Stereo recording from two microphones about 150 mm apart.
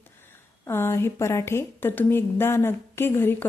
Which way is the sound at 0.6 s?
15° left (ahead or behind).